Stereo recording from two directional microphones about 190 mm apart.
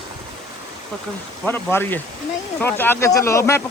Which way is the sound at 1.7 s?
10° left (ahead or behind).